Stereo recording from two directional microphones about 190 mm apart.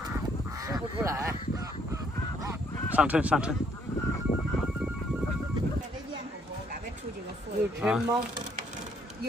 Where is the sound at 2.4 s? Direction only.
5° right (ahead or behind).